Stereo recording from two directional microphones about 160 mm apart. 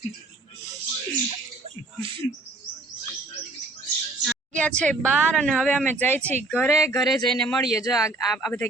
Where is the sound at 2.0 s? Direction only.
35° right (ahead or behind).